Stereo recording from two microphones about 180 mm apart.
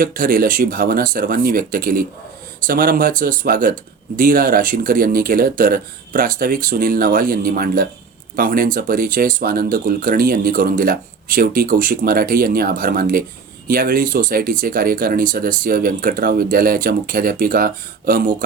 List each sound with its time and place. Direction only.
0.0 s speech: 50° right (ahead or behind)